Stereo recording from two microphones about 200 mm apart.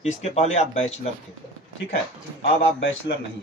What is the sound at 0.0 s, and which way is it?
Speech, 35° left (ahead or behind).